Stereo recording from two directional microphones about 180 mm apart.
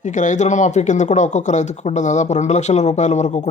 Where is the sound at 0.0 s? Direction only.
45° left (ahead or behind).